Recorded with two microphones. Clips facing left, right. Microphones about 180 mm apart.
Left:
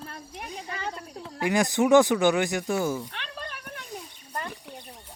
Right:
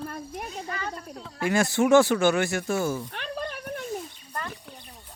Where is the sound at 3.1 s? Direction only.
45° right (ahead or behind).